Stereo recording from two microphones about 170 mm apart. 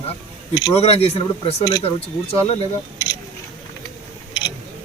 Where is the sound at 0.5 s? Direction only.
25° left (ahead or behind).